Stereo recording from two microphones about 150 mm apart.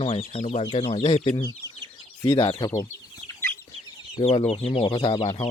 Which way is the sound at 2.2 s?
25° left (ahead or behind).